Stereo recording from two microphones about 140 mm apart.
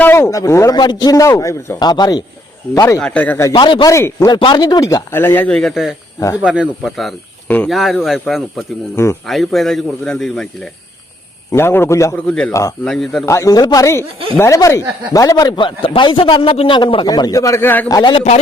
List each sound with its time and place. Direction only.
0.0 s a man's voice: 15° left (ahead or behind)
3.0 s a man's voice: 10° left (ahead or behind)
3.4 s a man's voice: 30° left (ahead or behind)
3.9 s a man's voice: 20° left (ahead or behind)
4.3 s a man's voice: 35° left (ahead or behind); by 5.5 s 15° left (ahead or behind)
5.5 s a man's voice: 5° left (ahead or behind)
6.1 s a man's voice: 25° left (ahead or behind)
6.4 s a man's voice: 5° right (ahead or behind)
7.4 s speech: 10° left (ahead or behind)
7.7 s a man's voice: centre (ahead or behind)
11.5 s a man's voice: 15° left (ahead or behind)
12.1 s a man's voice: 5° left (ahead or behind)
13.2 s a man's voice: 20° left (ahead or behind)
17.8 s a man's voice: 30° left (ahead or behind)